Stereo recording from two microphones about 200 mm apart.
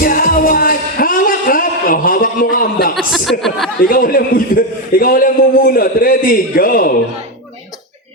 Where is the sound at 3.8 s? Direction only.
45° left (ahead or behind).